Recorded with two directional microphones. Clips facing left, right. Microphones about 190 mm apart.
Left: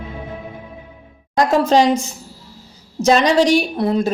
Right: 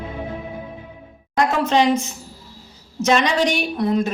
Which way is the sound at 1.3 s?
35° left (ahead or behind).